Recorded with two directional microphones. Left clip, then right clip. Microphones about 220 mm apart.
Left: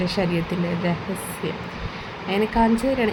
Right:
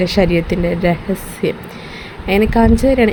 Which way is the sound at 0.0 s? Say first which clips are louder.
Right 9 dB; 30° right (ahead or behind).